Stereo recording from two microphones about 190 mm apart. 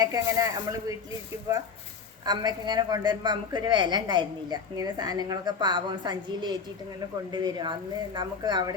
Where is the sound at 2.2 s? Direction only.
20° right (ahead or behind).